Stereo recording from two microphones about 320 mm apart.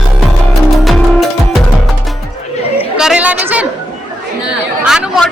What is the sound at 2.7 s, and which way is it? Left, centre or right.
Speech, centre.